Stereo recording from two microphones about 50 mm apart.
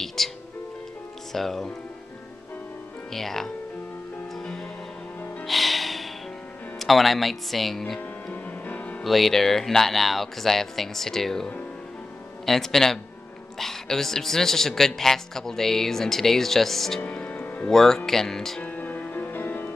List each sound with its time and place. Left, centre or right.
0.0 s music: centre
1.3 s speech: centre
3.1 s speech: centre
5.5 s music: centre
6.8 s speech: centre
8.3 s music: left
9.0 s speech: centre
12.4 s speech: centre
17.0 s music: left
17.6 s speech: centre
18.6 s music: left